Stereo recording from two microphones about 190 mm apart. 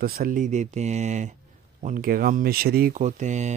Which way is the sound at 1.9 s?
50° right (ahead or behind).